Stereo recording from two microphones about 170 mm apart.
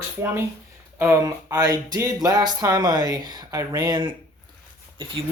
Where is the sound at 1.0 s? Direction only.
15° right (ahead or behind).